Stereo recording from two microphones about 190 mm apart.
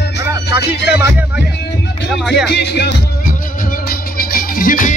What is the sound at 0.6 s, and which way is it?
Music, 60° left (ahead or behind).